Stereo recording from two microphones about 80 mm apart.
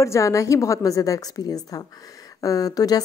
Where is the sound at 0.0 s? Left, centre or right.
Left.